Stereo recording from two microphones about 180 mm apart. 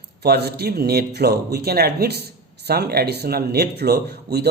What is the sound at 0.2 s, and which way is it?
Speech, 65° right (ahead or behind).